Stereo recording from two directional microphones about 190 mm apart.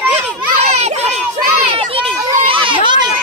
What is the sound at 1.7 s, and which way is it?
Children playing, 30° right (ahead or behind).